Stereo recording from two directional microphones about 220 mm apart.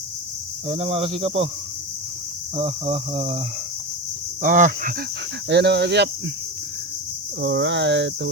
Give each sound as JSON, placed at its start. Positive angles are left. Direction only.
{"t": 0.7, "sound": "speech", "side_deg": -30}
{"t": 2.6, "sound": "speech", "side_deg": -25}
{"t": 4.4, "sound": "a sound", "side_deg": -35}
{"t": 5.5, "sound": "speech", "side_deg": -50}
{"t": 7.4, "sound": "speech", "side_deg": -55}